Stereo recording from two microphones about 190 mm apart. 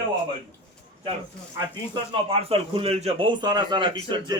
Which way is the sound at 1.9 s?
30° right (ahead or behind).